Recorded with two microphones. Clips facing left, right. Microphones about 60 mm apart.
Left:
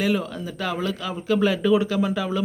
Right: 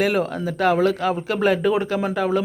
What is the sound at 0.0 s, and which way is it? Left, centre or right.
A man's voice, right.